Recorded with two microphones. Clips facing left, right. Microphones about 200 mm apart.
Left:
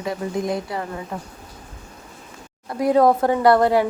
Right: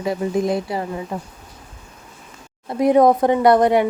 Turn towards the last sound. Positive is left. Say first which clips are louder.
# right 2 dB
turn(degrees=-20)  # may be behind; listen again after turning